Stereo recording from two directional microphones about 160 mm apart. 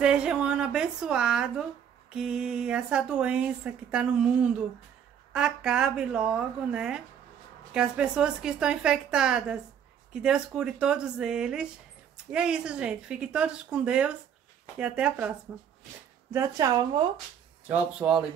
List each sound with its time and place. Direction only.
0.0 s a woman's voice: 5° right (ahead or behind)
16.3 s speech: 20° right (ahead or behind)
17.6 s speech: 5° right (ahead or behind)